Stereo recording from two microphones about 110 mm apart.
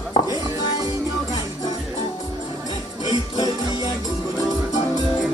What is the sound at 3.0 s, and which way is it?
Music, 40° left (ahead or behind).